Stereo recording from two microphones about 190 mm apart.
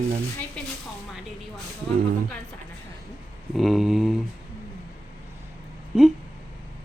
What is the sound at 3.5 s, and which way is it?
Speech, centre (ahead or behind).